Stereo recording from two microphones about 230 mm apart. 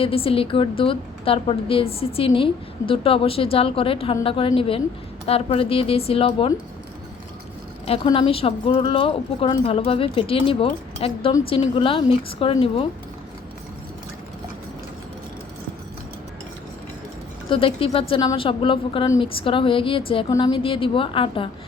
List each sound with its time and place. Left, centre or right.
0.0 s a woman's voice: left
7.9 s a woman's voice: left
17.5 s a woman's voice: left